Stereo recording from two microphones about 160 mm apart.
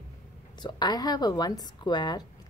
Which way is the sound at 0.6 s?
25° left (ahead or behind).